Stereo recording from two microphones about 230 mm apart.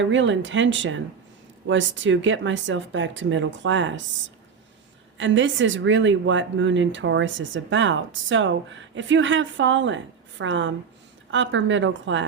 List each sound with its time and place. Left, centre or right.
0.0 s speech: right
5.1 s speech: right